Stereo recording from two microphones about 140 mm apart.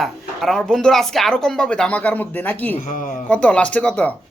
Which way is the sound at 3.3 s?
10° left (ahead or behind).